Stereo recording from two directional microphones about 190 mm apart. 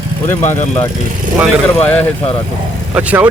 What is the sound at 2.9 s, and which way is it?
Speech, 5° right (ahead or behind).